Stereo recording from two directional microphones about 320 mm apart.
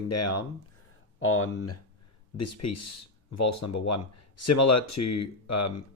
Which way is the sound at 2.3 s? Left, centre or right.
Left.